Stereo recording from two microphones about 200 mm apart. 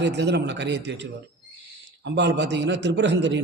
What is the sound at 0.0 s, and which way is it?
A man's voice, 60° right (ahead or behind).